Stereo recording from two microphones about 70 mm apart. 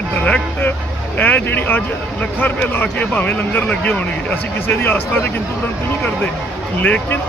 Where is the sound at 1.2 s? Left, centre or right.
Left.